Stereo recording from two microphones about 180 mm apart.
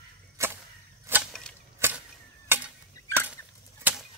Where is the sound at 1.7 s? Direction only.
10° right (ahead or behind).